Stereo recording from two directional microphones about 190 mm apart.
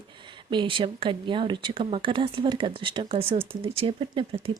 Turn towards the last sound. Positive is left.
turn(degrees=-25)  # may be behind; listen again after turning